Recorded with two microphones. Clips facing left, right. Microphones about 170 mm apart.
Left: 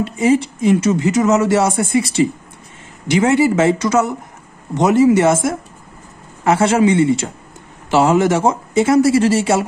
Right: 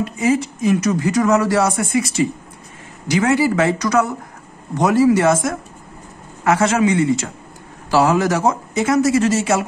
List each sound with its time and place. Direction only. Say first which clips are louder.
0.0 s speech: left 3 dB; 30° left (ahead or behind)